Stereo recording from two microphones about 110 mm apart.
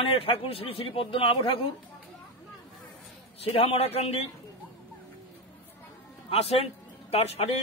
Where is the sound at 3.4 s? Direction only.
60° left (ahead or behind).